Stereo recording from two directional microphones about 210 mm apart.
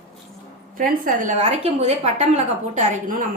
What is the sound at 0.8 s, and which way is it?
A woman's voice, 40° right (ahead or behind).